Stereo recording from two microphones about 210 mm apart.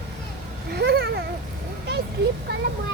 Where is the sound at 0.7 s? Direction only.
50° right (ahead or behind).